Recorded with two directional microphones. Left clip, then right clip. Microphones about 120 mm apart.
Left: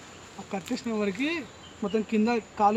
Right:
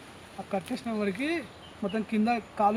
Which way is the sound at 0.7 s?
25° right (ahead or behind).